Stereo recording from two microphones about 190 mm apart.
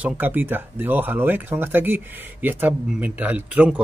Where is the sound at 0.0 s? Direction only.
10° right (ahead or behind).